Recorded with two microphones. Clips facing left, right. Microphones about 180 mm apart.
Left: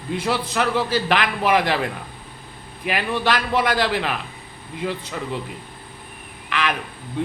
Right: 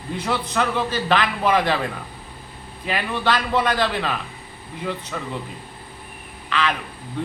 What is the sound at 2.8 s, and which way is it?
A woman's voice, 15° left (ahead or behind).